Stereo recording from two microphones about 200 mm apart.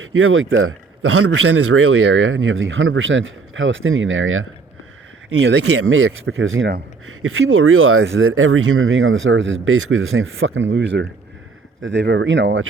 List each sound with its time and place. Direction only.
0.0 s a man's voice: 90° right
5.4 s a man's voice: 70° right (ahead or behind)